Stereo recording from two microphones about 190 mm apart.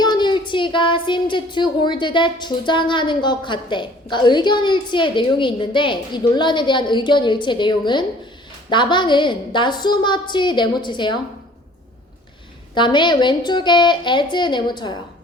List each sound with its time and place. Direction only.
0.0 s speech: 25° left (ahead or behind)
12.7 s speech: 25° left (ahead or behind)